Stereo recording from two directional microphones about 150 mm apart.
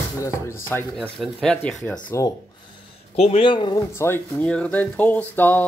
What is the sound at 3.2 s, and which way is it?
Speech, 40° left (ahead or behind).